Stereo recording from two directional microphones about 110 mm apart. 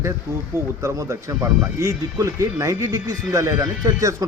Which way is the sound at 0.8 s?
30° right (ahead or behind).